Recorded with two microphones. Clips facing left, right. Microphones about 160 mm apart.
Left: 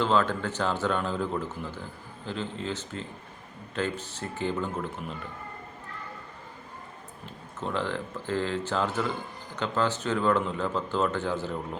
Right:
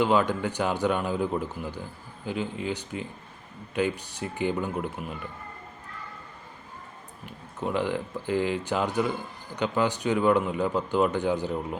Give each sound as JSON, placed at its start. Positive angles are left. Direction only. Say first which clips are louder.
{"t": 0.0, "sound": "a man's voice", "louder": "right 2 dB", "side_deg": -15}
{"t": 7.6, "sound": "a man's voice", "louder": "right 3 dB", "side_deg": -15}